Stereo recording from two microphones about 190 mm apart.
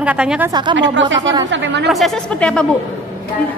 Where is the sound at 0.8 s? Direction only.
75° right (ahead or behind).